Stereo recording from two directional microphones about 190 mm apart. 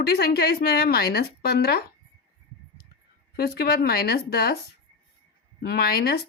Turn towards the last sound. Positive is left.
turn(degrees=55)  # may be behind; listen again after turning